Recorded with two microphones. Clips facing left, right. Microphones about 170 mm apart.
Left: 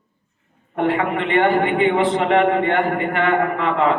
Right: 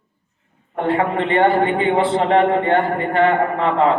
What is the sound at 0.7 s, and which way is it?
A man's voice, 30° right (ahead or behind).